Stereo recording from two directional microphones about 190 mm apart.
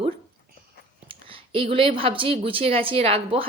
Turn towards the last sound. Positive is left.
turn(degrees=-30)  # may be behind; listen again after turning